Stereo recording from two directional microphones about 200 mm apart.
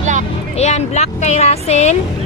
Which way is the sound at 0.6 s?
35° left (ahead or behind).